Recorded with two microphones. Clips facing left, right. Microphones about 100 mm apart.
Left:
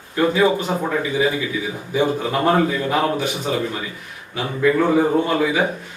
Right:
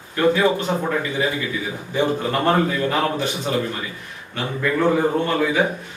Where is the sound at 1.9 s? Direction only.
10° left (ahead or behind).